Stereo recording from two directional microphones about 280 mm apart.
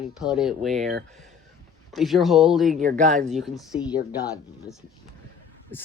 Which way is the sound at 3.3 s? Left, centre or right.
Centre.